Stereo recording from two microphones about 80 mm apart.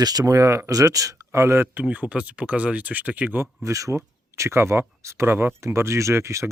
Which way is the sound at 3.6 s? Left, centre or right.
Right.